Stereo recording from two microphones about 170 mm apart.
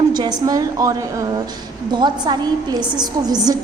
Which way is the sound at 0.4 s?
20° right (ahead or behind).